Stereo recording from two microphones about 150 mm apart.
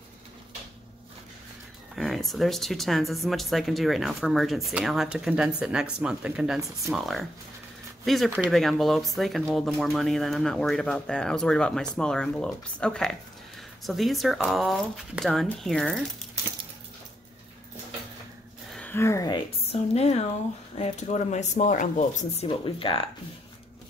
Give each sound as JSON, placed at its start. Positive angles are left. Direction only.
{"t": 2.0, "sound": "speech", "side_deg": 0}
{"t": 18.7, "sound": "speech", "side_deg": 10}
{"t": 19.7, "sound": "speech", "side_deg": 45}
{"t": 22.5, "sound": "speech", "side_deg": 35}